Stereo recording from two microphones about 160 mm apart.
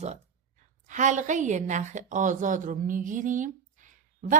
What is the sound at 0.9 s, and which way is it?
A woman's voice, 50° right (ahead or behind).